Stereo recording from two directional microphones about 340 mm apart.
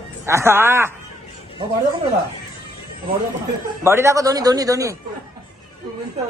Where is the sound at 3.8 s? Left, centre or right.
Centre.